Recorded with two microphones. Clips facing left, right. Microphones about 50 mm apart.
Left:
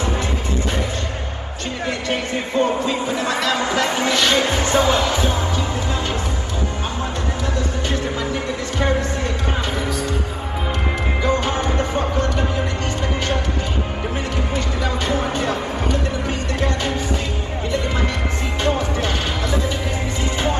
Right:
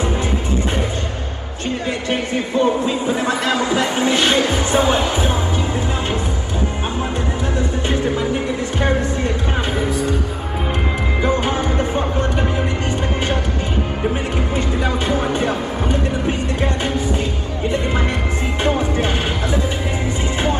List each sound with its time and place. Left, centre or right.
2.0 s speech: right
4.5 s music: left
4.7 s speech: right
7.9 s music: right
9.8 s music: right
11.2 s music: right
15.0 s music: right
18.6 s music: right